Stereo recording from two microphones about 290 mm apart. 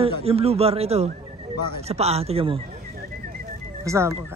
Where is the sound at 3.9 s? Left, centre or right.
Centre.